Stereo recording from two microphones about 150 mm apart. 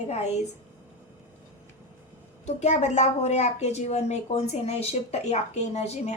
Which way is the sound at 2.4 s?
50° left (ahead or behind).